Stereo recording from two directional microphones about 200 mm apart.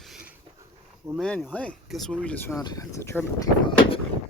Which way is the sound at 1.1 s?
Centre (ahead or behind).